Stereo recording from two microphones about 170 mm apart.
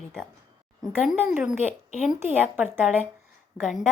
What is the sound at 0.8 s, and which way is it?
A woman's voice, 5° right (ahead or behind).